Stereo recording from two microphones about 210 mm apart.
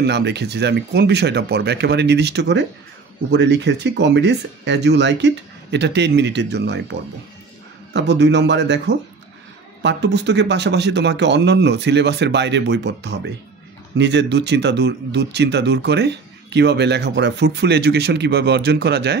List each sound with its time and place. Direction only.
0.0 s speech: 55° right (ahead or behind)